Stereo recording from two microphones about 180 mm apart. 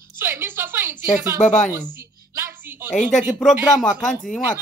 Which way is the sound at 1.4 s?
45° left (ahead or behind).